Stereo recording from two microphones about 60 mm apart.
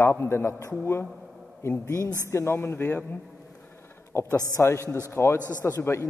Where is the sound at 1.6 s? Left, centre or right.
Left.